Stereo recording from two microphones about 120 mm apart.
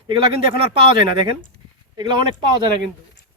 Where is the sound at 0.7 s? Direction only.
45° right (ahead or behind).